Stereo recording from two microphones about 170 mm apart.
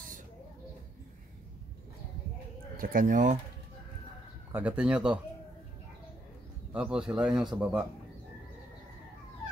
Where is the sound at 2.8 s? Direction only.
55° right (ahead or behind).